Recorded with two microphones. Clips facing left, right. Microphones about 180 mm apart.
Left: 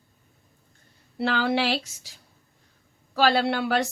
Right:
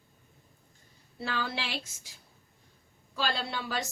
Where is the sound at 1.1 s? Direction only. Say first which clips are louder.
Left 11 dB; 75° left (ahead or behind).